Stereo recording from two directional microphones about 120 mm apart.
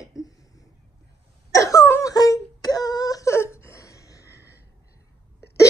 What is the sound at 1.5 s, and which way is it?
Wail, 25° left (ahead or behind).